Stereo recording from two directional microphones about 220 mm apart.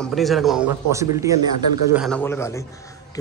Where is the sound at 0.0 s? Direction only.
Centre (ahead or behind).